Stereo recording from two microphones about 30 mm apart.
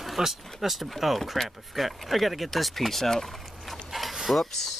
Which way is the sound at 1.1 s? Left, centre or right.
Centre.